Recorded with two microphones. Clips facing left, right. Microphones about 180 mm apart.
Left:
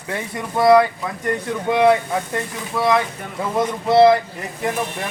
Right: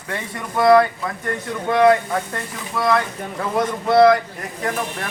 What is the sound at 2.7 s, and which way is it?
Speech, 20° left (ahead or behind).